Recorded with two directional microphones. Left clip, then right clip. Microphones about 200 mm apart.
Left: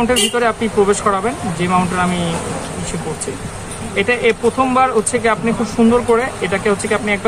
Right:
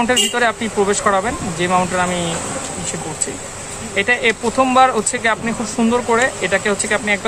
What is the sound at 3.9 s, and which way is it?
Speech, 20° right (ahead or behind).